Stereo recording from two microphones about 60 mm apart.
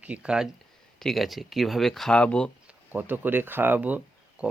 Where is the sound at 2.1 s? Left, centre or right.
Centre.